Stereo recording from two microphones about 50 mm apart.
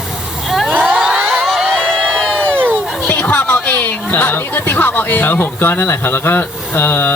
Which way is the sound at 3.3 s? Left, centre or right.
Left.